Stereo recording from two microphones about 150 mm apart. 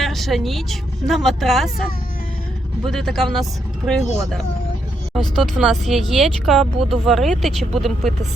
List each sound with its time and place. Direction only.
0.0 s speech: centre (ahead or behind)